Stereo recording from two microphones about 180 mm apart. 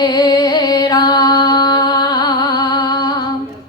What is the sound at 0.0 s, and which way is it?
Music, 20° left (ahead or behind).